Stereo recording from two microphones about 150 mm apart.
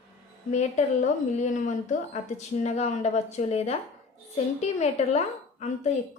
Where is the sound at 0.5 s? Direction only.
50° left (ahead or behind).